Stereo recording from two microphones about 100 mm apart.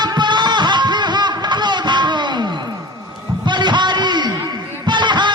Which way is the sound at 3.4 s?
50° right (ahead or behind).